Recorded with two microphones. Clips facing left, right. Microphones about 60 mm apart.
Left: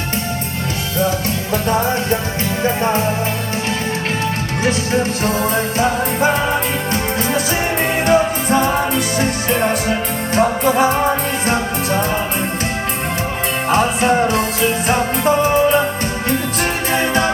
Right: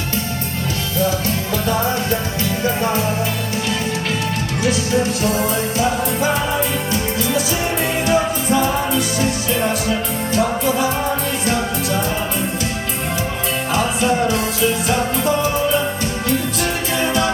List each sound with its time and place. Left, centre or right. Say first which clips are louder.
1.6 s music: left 2 dB; left
4.6 s music: left 1 dB; left
13.7 s music: left 4 dB; left
16.9 s music: left 2 dB; left